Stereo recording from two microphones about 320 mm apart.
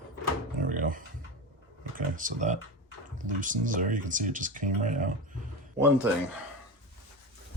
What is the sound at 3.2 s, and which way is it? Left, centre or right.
Speech, right.